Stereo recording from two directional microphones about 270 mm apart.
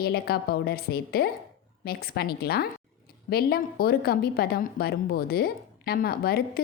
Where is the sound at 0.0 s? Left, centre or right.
Left.